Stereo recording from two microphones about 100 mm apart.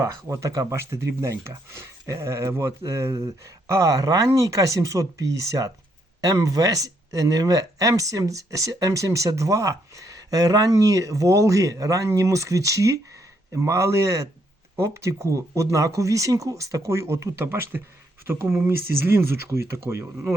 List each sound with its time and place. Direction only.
0.0 s speech: 30° right (ahead or behind)